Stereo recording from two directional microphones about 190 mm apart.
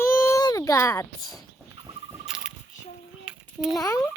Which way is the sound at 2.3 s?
5° right (ahead or behind).